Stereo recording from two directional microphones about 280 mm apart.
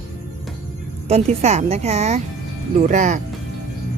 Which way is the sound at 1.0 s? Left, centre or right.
Right.